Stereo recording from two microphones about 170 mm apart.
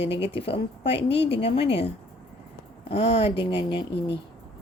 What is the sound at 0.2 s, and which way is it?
Speech, 35° left (ahead or behind).